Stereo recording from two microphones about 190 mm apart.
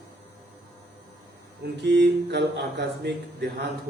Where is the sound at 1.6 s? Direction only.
60° right (ahead or behind).